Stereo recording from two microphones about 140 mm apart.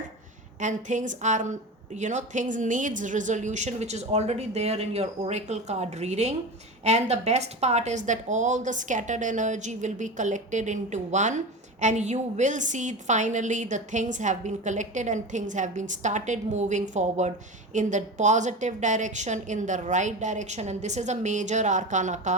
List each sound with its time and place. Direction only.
0.6 s a woman's voice: 60° right (ahead or behind)